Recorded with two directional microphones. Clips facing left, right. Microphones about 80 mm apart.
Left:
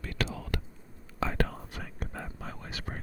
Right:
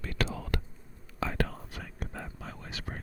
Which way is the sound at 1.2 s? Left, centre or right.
Left.